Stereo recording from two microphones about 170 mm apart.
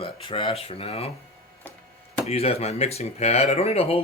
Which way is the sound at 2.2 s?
35° left (ahead or behind).